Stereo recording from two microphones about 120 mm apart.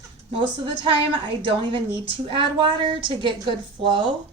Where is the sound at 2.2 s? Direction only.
45° right (ahead or behind).